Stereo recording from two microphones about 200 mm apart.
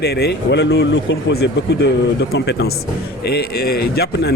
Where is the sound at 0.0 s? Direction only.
55° left (ahead or behind).